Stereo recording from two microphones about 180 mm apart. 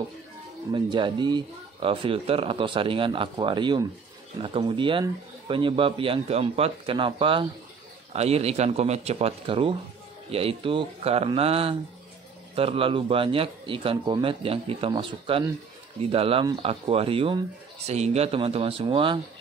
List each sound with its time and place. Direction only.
0.7 s speech: 25° right (ahead or behind)